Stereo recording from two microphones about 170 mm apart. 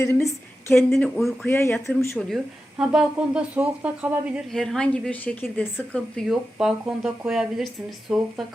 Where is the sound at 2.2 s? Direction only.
Centre (ahead or behind).